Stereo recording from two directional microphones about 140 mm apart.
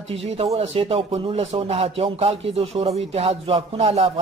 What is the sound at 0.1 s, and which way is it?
Speech, 45° right (ahead or behind).